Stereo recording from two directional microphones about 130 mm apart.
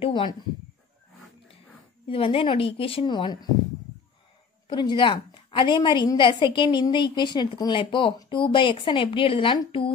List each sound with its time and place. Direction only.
0.0 s a sound: 40° left (ahead or behind)
2.0 s a woman's voice: 45° left (ahead or behind)
4.6 s a woman's voice: 35° left (ahead or behind)